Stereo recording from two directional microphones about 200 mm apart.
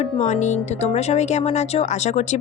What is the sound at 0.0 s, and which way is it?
Speech, 35° left (ahead or behind).